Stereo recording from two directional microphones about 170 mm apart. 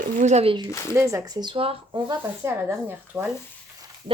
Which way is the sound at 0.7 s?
15° left (ahead or behind).